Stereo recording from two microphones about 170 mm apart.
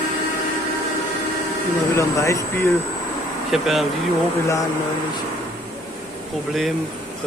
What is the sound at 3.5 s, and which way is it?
Speech, centre (ahead or behind).